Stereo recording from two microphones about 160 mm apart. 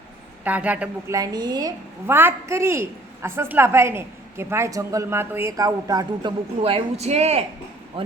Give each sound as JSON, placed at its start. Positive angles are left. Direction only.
{"t": 0.4, "sound": "a woman's voice", "side_deg": -10}
{"t": 1.1, "sound": "a woman's voice", "side_deg": -25}
{"t": 2.0, "sound": "a woman's voice", "side_deg": -15}
{"t": 6.6, "sound": "speech", "side_deg": -40}